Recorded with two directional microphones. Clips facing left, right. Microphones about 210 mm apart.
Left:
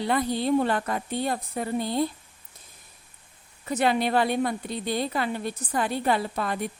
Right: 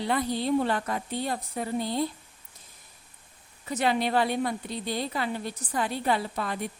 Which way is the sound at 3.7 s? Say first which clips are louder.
Left 2 dB; 55° left (ahead or behind).